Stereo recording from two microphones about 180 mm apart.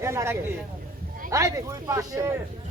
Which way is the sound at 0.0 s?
15° right (ahead or behind).